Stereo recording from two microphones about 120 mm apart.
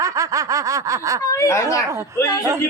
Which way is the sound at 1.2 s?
25° left (ahead or behind).